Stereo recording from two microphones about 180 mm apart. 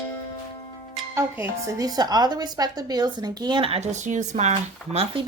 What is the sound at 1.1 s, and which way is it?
Speech, 15° right (ahead or behind).